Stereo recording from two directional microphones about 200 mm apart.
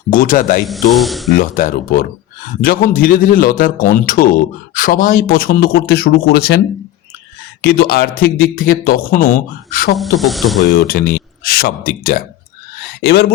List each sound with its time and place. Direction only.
0.1 s a man's voice: 45° left (ahead or behind)
0.7 s speech: centre (ahead or behind)
1.4 s a man's voice: 45° left (ahead or behind)
7.6 s a man's voice: 50° left (ahead or behind)
10.2 s speech: centre (ahead or behind)
10.7 s a man's voice: 50° left (ahead or behind)